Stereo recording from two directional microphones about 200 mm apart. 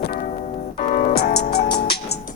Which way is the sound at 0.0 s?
50° left (ahead or behind).